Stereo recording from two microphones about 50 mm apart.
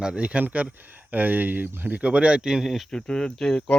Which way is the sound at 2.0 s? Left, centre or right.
Right.